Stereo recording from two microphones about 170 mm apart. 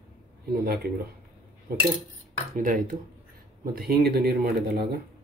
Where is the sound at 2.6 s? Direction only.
50° right (ahead or behind).